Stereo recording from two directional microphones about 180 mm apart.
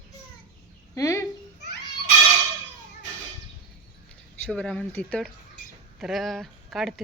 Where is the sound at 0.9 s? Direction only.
15° left (ahead or behind).